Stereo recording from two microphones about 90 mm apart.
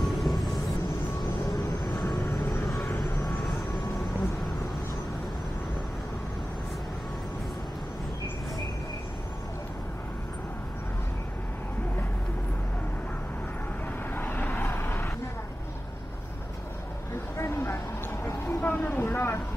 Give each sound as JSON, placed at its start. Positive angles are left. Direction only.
{"t": 0.0, "sound": "vehicle", "side_deg": 0}
{"t": 2.0, "sound": "vehicle", "side_deg": 30}
{"t": 14.1, "sound": "vehicle", "side_deg": 20}
{"t": 17.4, "sound": "a sound", "side_deg": 30}
{"t": 18.2, "sound": "vehicle", "side_deg": 25}